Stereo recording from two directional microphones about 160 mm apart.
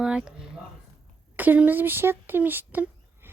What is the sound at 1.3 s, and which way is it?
Speech, 10° right (ahead or behind).